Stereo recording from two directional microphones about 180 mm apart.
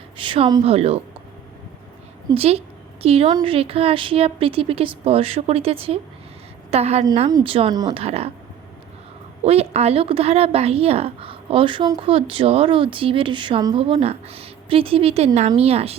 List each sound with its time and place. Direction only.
0.2 s speech: 30° right (ahead or behind)
2.3 s a woman's voice: 35° right (ahead or behind)
9.4 s a woman's voice: 35° right (ahead or behind)